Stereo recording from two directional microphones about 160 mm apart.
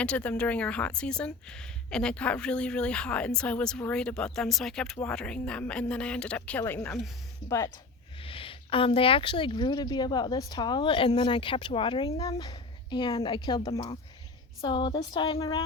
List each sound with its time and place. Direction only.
0.0 s speech: 10° left (ahead or behind)
8.2 s speech: 35° left (ahead or behind)